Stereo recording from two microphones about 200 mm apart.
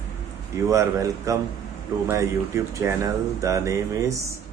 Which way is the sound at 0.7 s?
15° right (ahead or behind).